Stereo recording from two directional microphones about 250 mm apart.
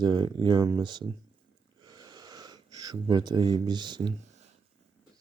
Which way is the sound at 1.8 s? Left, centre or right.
Centre.